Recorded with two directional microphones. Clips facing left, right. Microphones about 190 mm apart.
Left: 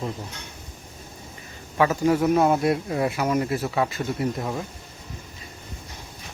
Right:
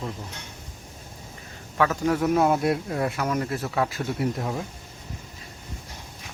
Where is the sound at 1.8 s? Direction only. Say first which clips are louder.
Left 3 dB; 5° left (ahead or behind).